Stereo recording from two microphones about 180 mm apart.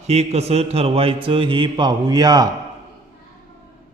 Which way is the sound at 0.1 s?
35° right (ahead or behind).